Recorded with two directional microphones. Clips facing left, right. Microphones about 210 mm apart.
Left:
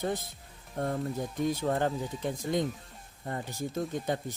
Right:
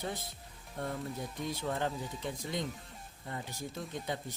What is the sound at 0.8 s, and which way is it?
Speech, 45° left (ahead or behind).